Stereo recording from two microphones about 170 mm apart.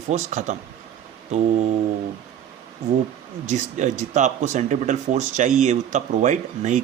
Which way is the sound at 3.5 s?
45° right (ahead or behind).